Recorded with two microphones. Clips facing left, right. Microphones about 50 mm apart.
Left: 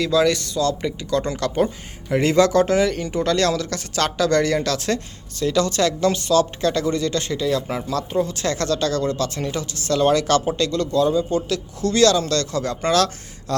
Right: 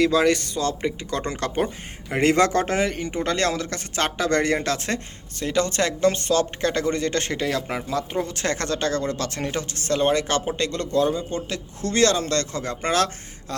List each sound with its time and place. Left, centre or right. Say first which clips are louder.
0.0 s a woman's voice: even; right
2.9 s a woman's voice: left 4 dB; right
7.8 s speech: left 3 dB; right
8.2 s a woman's voice: left 3 dB; right
13.5 s a sound: left 8 dB; centre